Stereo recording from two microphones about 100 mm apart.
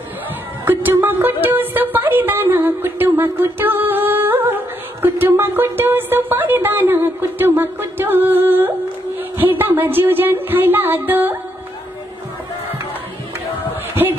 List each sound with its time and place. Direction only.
0.7 s speech: 20° right (ahead or behind)
1.4 s music: 20° right (ahead or behind)
5.0 s speech: 20° right (ahead or behind)